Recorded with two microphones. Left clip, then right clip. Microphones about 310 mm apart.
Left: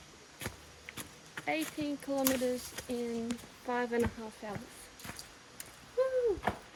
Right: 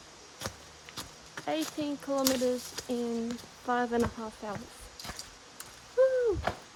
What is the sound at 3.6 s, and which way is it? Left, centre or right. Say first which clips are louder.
Speech: right 4 dB; right.